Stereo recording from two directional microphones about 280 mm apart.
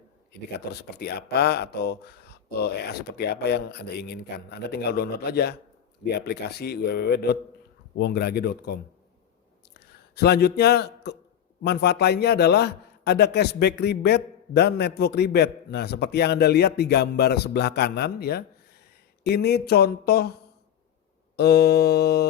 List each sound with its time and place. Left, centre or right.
0.5 s a man's voice: left
3.2 s a man's voice: left
10.2 s a man's voice: left
21.3 s a man's voice: left